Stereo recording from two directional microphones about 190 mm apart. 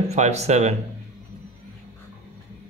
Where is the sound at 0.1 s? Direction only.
35° right (ahead or behind).